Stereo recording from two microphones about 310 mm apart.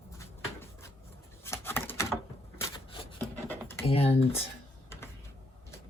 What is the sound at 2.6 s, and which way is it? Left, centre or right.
Rub, centre.